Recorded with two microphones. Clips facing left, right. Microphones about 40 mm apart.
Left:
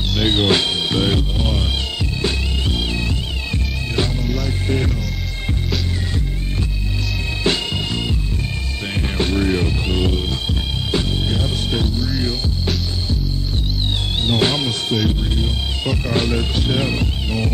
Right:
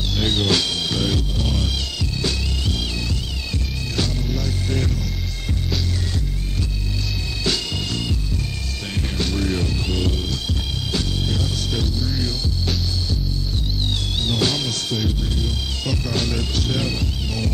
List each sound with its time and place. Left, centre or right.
0.2 s music: left
3.5 s music: left
7.4 s music: left
14.2 s music: left